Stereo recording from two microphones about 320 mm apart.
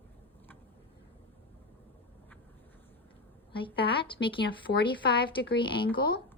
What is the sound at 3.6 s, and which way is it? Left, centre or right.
Speech, centre.